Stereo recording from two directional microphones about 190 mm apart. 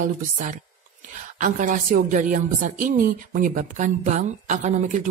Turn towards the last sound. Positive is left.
turn(degrees=-40)  # may be behind; listen again after turning